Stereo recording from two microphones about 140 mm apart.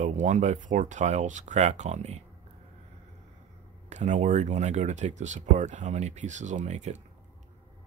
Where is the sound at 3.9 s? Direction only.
55° right (ahead or behind).